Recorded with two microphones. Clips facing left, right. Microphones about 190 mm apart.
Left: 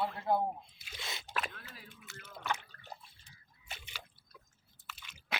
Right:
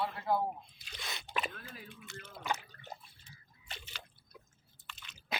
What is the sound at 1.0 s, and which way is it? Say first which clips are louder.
Single-lens reflex camera: even; 25° left (ahead or behind).